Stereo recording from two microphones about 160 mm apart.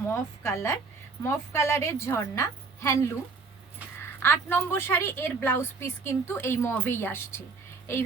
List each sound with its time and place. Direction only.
0.1 s a woman's voice: 15° left (ahead or behind)